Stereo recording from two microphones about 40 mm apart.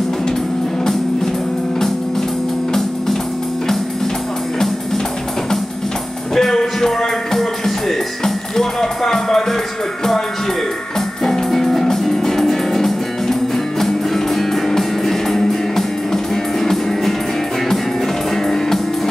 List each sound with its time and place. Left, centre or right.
6.3 s music: centre
11.2 s music: centre
18.3 s music: centre